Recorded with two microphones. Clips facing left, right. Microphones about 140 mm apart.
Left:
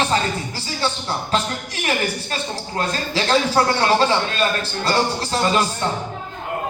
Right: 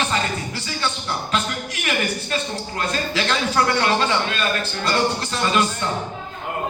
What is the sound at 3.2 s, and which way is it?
Speech, 30° left (ahead or behind).